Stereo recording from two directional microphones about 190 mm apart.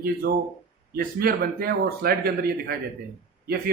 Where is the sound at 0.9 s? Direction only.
50° right (ahead or behind).